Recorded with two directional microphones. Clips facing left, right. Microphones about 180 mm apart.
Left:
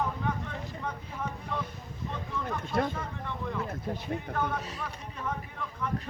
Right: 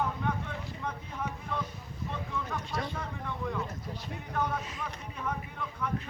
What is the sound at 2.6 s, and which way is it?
Speech, 50° left (ahead or behind).